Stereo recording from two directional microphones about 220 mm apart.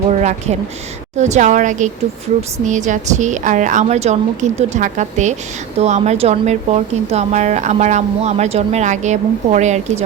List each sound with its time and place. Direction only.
0.1 s speech: 30° right (ahead or behind)